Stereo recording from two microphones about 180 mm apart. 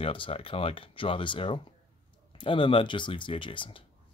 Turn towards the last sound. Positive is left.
turn(degrees=30)  # may be behind; listen again after turning